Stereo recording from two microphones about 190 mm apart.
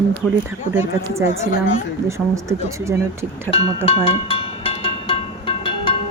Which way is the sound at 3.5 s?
30° left (ahead or behind).